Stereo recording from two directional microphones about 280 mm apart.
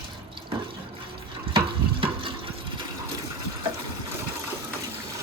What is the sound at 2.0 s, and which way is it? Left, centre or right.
Water, centre.